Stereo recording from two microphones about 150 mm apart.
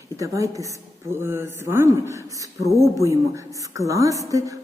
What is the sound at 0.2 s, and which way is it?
A woman's voice, 20° right (ahead or behind).